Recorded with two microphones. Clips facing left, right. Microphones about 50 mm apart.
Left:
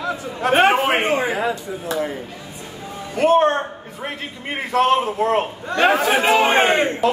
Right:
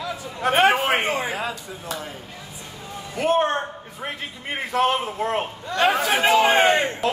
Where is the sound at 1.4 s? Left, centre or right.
Left.